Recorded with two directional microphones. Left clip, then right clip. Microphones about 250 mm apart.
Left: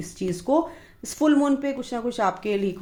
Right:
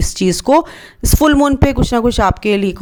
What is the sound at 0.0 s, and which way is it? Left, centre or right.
Speech, right.